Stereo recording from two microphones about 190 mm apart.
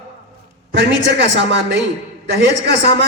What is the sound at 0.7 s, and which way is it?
A man's voice, 70° right (ahead or behind).